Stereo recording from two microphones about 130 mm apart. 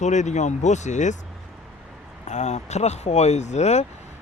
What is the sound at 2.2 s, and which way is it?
Speech, 65° left (ahead or behind).